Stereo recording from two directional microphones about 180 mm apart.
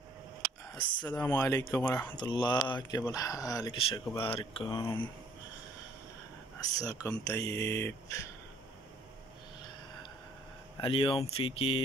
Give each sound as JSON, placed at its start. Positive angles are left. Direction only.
{"t": 1.1, "sound": "speech", "side_deg": 20}
{"t": 2.1, "sound": "speech", "side_deg": 25}
{"t": 4.8, "sound": "speech", "side_deg": 10}
{"t": 6.6, "sound": "speech", "side_deg": 20}
{"t": 10.8, "sound": "speech", "side_deg": 30}